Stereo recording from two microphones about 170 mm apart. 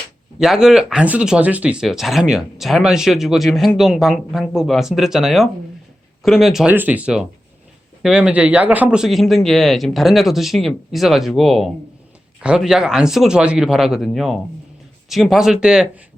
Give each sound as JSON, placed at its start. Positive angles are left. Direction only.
{"t": 0.3, "sound": "speech", "side_deg": 0}